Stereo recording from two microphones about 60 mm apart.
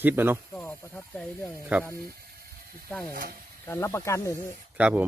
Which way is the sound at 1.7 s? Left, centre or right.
Right.